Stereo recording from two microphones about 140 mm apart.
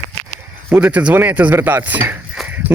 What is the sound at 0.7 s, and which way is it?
Speech, 10° right (ahead or behind).